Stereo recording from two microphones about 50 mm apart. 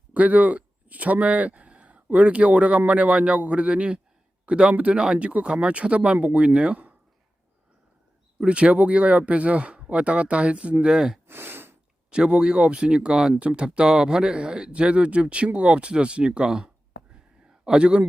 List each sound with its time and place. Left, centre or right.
0.1 s speech: right
8.4 s speech: right
10.9 s speech: centre
11.3 s a sound: right
12.1 s speech: centre